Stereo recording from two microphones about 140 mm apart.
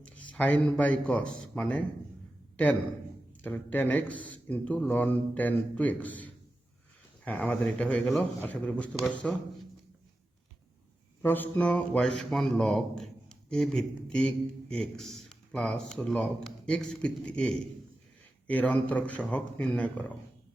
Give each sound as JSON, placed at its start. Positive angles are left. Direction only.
{"t": 0.0, "sound": "speech", "side_deg": 10}
{"t": 3.4, "sound": "speech", "side_deg": 15}
{"t": 11.2, "sound": "a man's voice", "side_deg": 15}